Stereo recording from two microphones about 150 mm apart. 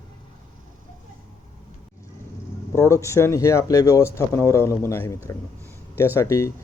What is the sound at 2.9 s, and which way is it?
A man's voice, 20° left (ahead or behind).